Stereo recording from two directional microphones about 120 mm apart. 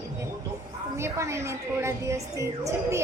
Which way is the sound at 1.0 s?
25° right (ahead or behind).